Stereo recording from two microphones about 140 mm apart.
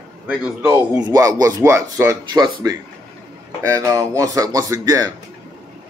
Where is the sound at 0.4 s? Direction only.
10° right (ahead or behind).